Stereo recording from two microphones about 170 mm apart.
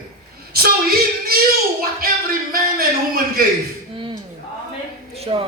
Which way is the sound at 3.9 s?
30° right (ahead or behind).